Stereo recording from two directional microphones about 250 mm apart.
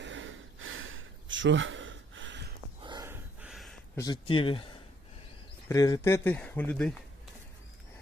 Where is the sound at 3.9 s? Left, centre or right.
Centre.